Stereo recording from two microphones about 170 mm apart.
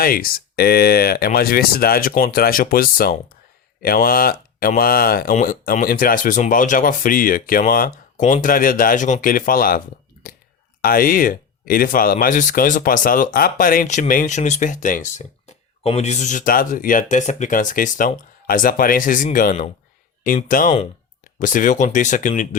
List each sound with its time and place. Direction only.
0.0 s speech: 60° left (ahead or behind)
10.2 s clicking: 45° left (ahead or behind)
10.8 s speech: 55° left (ahead or behind)